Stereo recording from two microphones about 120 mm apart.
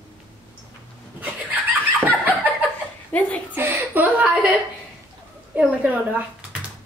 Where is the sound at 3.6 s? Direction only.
15° right (ahead or behind).